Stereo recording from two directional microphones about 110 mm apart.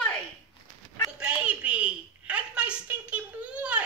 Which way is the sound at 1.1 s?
10° right (ahead or behind).